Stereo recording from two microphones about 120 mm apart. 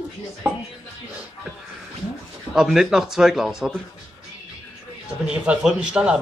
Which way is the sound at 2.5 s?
5° right (ahead or behind).